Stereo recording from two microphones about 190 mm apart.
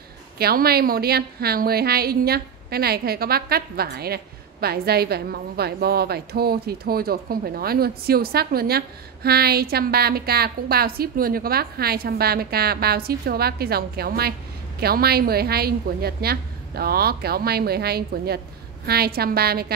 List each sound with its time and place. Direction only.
0.4 s a woman's voice: 55° right (ahead or behind)